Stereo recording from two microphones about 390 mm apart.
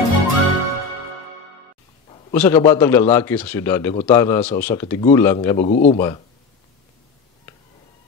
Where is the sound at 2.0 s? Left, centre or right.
Centre.